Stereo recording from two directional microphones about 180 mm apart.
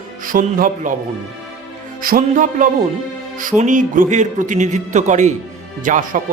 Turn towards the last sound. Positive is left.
turn(degrees=-45)  # may be behind; listen again after turning